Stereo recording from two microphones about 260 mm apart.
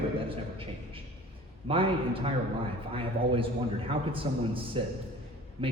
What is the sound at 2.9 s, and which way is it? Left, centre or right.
A man's voice, right.